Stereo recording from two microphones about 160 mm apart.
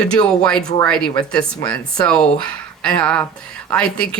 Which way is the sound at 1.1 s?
25° left (ahead or behind).